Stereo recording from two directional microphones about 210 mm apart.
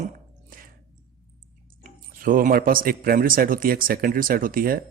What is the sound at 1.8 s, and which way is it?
A man's voice, 40° right (ahead or behind).